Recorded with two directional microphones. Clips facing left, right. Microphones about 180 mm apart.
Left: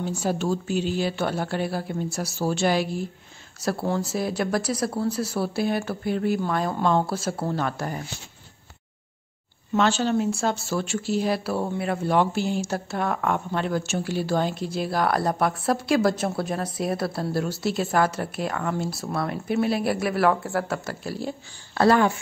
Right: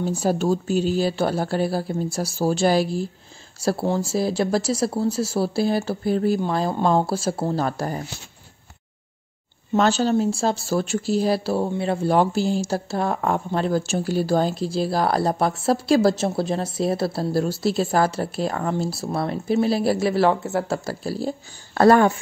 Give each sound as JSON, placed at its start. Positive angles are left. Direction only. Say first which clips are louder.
{"t": 0.0, "sound": "speech", "louder": "right 4 dB", "side_deg": -40}
{"t": 9.8, "sound": "speech", "louder": "right 3 dB", "side_deg": -40}